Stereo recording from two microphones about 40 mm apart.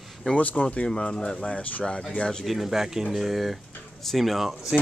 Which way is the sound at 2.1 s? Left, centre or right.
Centre.